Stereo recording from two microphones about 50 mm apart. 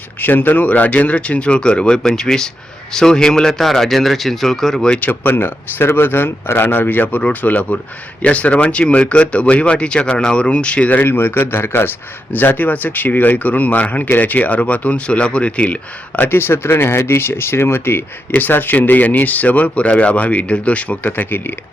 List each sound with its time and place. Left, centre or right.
0.2 s speech: left; by 4.9 s centre
4.9 s a man's voice: left
11.0 s a man's voice: left
12.3 s speech: left
16.3 s speech: left